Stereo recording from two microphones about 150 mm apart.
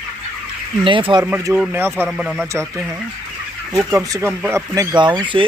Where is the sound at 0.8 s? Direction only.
35° right (ahead or behind).